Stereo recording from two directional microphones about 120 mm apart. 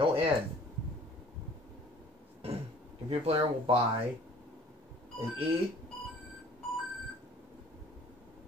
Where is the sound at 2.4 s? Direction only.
55° right (ahead or behind).